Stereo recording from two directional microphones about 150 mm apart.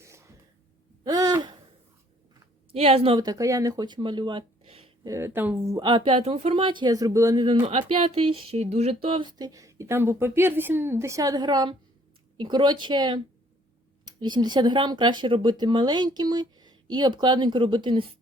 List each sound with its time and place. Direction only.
0.0 s a sound: 20° right (ahead or behind)
2.7 s speech: 40° right (ahead or behind)
3.2 s speech: 20° right (ahead or behind); by 4.9 s 40° right (ahead or behind)
5.0 s speech: 20° right (ahead or behind)
5.7 s speech: 30° right (ahead or behind)